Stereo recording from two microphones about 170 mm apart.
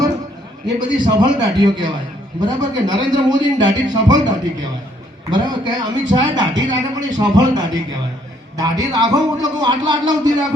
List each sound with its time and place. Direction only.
0.8 s a man's voice: 25° right (ahead or behind)